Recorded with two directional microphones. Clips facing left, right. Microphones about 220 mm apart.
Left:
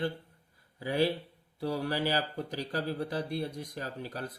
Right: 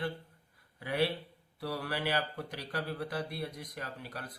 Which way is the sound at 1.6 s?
30° left (ahead or behind).